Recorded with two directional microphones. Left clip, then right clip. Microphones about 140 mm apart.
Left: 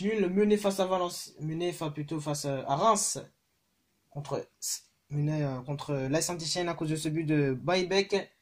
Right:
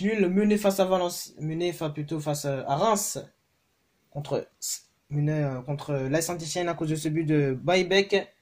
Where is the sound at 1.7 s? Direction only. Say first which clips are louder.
Right 4 dB; centre (ahead or behind).